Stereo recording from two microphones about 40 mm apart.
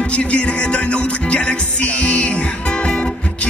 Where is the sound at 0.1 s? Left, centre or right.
Left.